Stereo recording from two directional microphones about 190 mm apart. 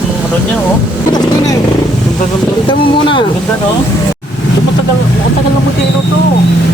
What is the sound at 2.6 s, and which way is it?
Speech, 25° left (ahead or behind).